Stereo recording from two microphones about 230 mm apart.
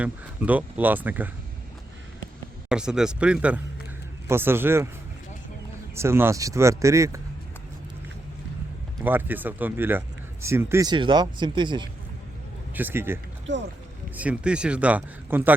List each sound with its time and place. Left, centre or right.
0.0 s speech: centre
2.6 s speech: centre
5.9 s speech: centre
9.0 s speech: centre
12.7 s speech: centre
14.2 s speech: centre